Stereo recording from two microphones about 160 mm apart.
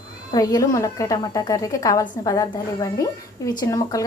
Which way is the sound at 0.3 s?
20° left (ahead or behind).